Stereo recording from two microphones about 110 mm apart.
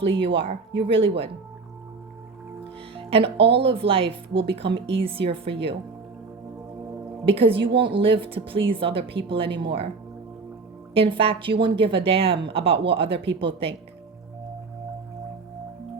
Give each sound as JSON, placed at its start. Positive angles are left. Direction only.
{"t": 0.0, "sound": "speech", "side_deg": -55}
{"t": 2.9, "sound": "speech", "side_deg": -55}
{"t": 7.3, "sound": "a woman's voice", "side_deg": -55}
{"t": 10.9, "sound": "speech", "side_deg": -55}